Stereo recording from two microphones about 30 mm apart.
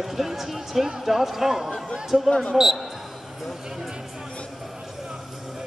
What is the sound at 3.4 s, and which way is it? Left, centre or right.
Music, centre.